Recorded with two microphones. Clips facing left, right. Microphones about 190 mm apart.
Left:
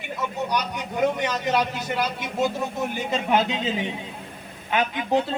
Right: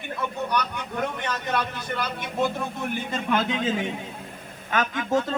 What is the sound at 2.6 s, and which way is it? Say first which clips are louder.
Speech: left 2 dB; 20° left (ahead or behind).